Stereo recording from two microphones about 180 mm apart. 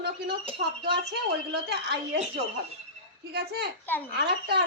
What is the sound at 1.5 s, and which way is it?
Speech, 65° right (ahead or behind).